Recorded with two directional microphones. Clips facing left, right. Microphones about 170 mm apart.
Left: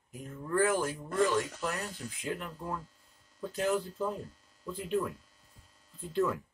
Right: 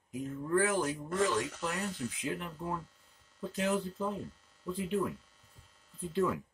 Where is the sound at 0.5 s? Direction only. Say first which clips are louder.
Left 1 dB; 20° right (ahead or behind).